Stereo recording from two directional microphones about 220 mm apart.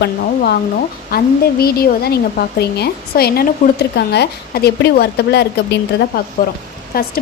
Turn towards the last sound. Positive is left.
turn(degrees=40)  # may be behind; listen again after turning